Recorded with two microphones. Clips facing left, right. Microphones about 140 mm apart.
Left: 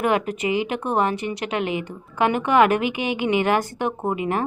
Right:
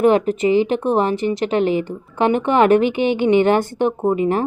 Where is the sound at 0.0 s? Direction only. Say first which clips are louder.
Right 7 dB; 30° right (ahead or behind).